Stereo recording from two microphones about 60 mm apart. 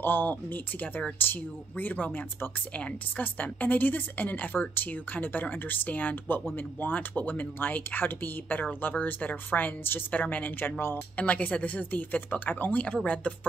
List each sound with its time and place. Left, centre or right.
0.0 s speech: left
3.2 s a woman's voice: left
11.1 s a woman's voice: left